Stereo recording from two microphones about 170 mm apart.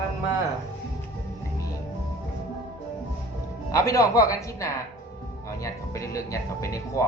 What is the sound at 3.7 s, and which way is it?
Speech, 20° left (ahead or behind).